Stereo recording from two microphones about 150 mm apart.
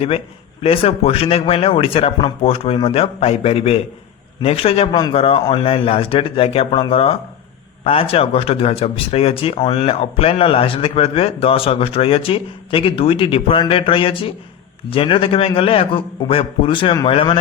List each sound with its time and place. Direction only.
0.6 s speech: 40° left (ahead or behind)